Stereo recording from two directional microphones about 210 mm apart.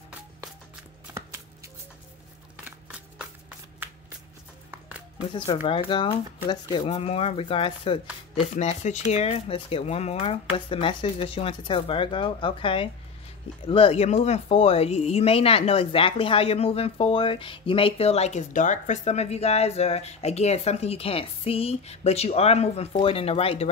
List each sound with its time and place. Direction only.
3.8 s shuffling cards: 10° right (ahead or behind)
4.6 s a sound: 10° right (ahead or behind)
5.7 s speech: 25° left (ahead or behind)